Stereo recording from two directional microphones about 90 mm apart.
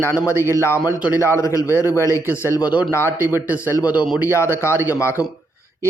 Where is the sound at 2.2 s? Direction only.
20° right (ahead or behind).